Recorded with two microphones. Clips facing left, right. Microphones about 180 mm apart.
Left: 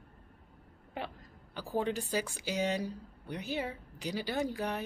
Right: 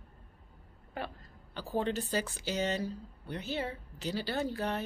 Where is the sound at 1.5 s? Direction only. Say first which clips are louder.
Even; 10° left (ahead or behind).